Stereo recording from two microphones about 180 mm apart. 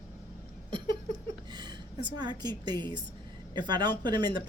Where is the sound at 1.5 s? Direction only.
25° right (ahead or behind).